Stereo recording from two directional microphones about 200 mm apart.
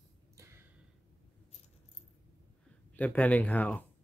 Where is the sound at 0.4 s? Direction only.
15° right (ahead or behind).